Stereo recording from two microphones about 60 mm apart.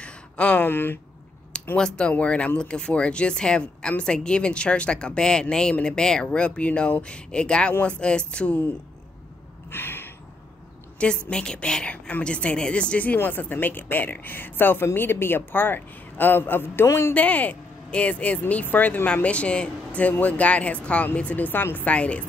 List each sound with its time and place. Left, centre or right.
0.0 s a sound: left
0.7 s a man's voice: left
1.5 s a sound: centre
2.0 s a woman's voice: centre
9.7 s gasp: left
11.0 s a woman's voice: centre; by 16.8 s left
16.8 s speech: left
17.1 s a woman's voice: left